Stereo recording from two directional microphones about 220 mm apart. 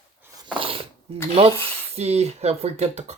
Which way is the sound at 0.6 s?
25° right (ahead or behind).